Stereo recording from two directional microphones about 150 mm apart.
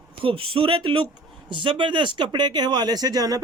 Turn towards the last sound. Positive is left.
turn(degrees=-25)  # may be behind; listen again after turning